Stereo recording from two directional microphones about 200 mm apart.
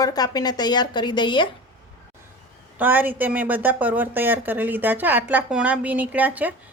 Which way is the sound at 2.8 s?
10° right (ahead or behind).